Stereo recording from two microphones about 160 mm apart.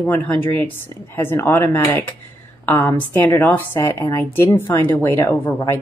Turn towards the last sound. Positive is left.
turn(degrees=15)  # may be behind; listen again after turning